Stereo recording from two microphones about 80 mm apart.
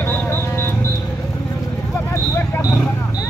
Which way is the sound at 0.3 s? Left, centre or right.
Left.